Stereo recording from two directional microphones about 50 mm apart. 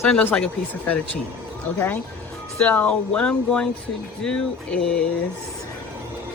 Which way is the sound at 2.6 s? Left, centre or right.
Left.